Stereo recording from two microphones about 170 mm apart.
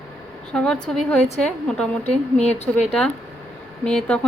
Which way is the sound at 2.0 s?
40° left (ahead or behind).